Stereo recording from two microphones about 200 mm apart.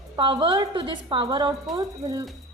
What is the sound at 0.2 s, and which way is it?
A woman's voice, 25° right (ahead or behind).